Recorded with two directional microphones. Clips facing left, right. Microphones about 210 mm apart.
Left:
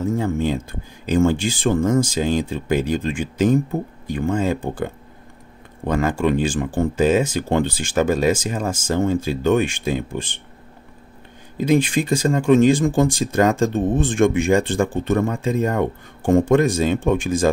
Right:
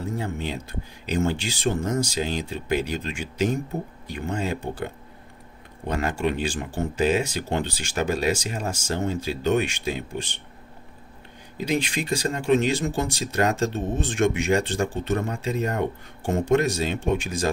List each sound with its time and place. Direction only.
0.1 s a sound: 45° left (ahead or behind)
1.0 s speech: 50° left (ahead or behind)
6.1 s speech: 50° left (ahead or behind)
11.5 s speech: 50° left (ahead or behind)